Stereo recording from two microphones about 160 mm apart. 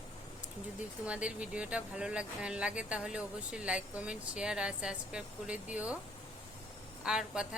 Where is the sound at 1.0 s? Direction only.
5° right (ahead or behind).